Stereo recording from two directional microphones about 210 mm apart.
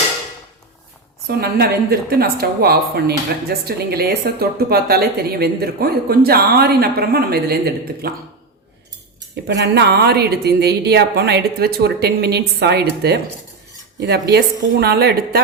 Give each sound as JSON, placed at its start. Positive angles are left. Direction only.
{"t": 1.4, "sound": "speech", "side_deg": -50}
{"t": 9.3, "sound": "speech", "side_deg": -55}